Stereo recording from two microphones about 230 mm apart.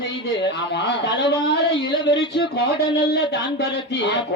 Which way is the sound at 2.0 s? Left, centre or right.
Left.